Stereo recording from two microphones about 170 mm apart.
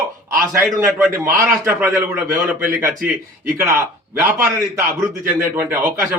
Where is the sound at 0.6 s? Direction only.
10° right (ahead or behind).